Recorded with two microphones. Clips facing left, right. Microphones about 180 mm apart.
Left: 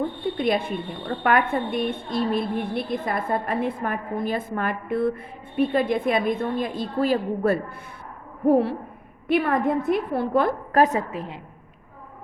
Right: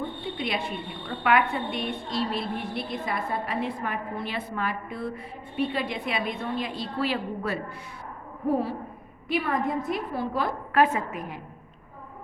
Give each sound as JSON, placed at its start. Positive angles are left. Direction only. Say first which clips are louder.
{"t": 0.3, "sound": "a woman's voice", "louder": "left 7 dB", "side_deg": 50}
{"t": 8.4, "sound": "owl", "louder": "left 7 dB", "side_deg": 65}
{"t": 9.2, "sound": "a woman's voice", "louder": "left 6 dB", "side_deg": 55}
{"t": 10.7, "sound": "a woman's voice", "louder": "left 3 dB", "side_deg": 40}